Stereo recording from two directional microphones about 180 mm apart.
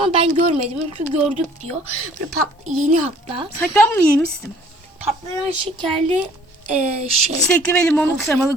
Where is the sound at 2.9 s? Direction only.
35° right (ahead or behind).